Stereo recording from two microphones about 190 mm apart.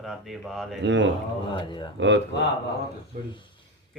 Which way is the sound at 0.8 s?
70° right (ahead or behind).